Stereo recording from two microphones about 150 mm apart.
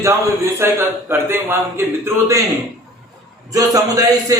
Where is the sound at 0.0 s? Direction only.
20° right (ahead or behind).